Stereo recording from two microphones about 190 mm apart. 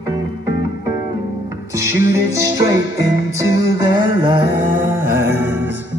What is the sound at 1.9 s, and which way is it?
Music, 15° right (ahead or behind).